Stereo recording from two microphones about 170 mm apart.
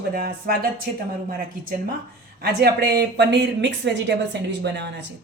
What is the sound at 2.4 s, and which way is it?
Speech, 65° right (ahead or behind).